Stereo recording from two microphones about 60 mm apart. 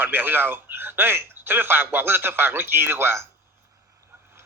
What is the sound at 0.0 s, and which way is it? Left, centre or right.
Speech, right.